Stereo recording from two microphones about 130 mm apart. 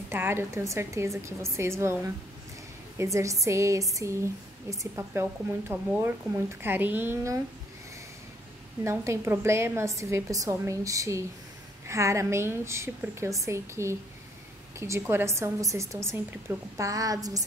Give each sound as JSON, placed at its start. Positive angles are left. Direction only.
{"t": 0.1, "sound": "a woman's voice", "side_deg": -15}
{"t": 8.8, "sound": "a woman's voice", "side_deg": -20}